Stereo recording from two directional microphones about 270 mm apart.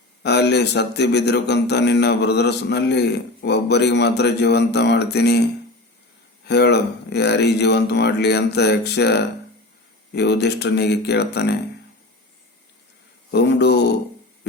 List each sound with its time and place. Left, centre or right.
0.2 s a man's voice: left
6.4 s a man's voice: left
13.3 s a man's voice: left